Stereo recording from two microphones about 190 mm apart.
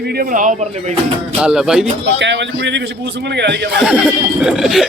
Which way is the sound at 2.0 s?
70° right (ahead or behind).